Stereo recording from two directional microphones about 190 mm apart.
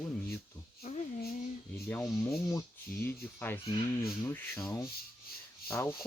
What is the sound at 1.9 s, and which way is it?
Speech, 10° left (ahead or behind).